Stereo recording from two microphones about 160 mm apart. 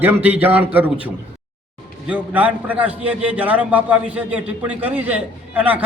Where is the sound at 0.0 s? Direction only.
10° right (ahead or behind).